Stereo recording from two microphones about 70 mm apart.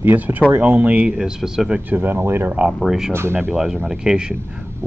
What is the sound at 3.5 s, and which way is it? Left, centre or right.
Speech, centre.